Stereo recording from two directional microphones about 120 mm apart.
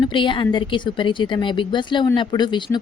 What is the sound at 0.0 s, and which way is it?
A woman's voice, 45° left (ahead or behind).